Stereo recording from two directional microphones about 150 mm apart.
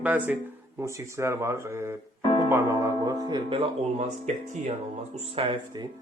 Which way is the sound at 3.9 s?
50° right (ahead or behind).